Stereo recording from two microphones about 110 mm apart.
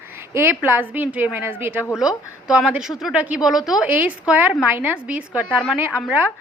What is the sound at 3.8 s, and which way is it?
A woman's voice, 15° right (ahead or behind).